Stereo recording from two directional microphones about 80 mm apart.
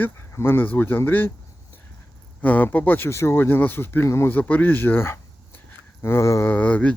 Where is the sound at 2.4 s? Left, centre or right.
Left.